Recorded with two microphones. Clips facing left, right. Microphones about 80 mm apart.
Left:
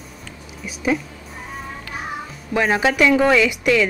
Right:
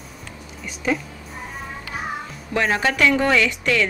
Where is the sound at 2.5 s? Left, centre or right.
Centre.